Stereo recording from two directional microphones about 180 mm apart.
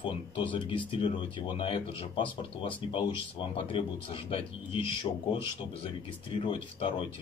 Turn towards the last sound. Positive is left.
turn(degrees=25)  # may be behind; listen again after turning